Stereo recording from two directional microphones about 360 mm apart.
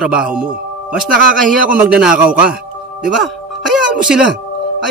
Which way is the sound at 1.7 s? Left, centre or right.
Centre.